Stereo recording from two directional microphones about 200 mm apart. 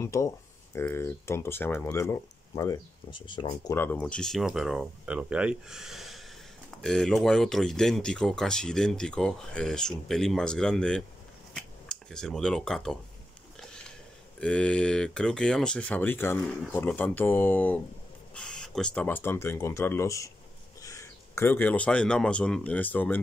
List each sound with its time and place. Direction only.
0.0 s speech: 15° left (ahead or behind)
14.4 s speech: 5° left (ahead or behind)